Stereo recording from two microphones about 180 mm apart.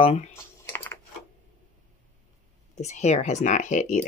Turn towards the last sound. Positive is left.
turn(degrees=45)  # may be behind; listen again after turning